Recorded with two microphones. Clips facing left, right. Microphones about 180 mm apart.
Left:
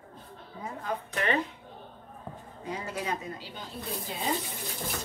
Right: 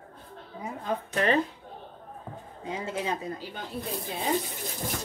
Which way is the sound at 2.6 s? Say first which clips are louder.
Right 3 dB; 25° right (ahead or behind).